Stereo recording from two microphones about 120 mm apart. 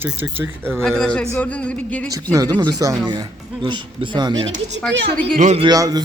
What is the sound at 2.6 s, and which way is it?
Speech, 30° right (ahead or behind).